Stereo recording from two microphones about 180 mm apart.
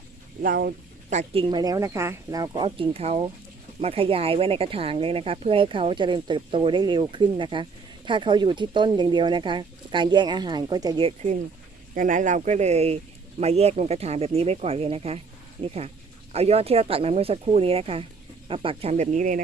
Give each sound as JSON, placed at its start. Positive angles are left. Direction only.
{"t": 0.4, "sound": "speech", "side_deg": -55}
{"t": 1.1, "sound": "speech", "side_deg": -30}
{"t": 11.9, "sound": "speech", "side_deg": -45}